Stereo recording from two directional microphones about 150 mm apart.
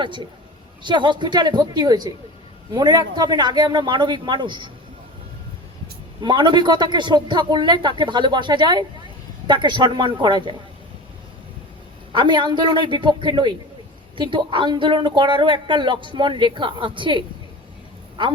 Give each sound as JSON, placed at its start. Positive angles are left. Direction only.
{"t": 0.0, "sound": "a woman's voice", "side_deg": -30}
{"t": 6.2, "sound": "a woman's voice", "side_deg": -30}
{"t": 12.1, "sound": "a woman's voice", "side_deg": -30}